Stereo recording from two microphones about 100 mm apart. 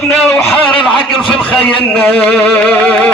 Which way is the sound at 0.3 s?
20° left (ahead or behind).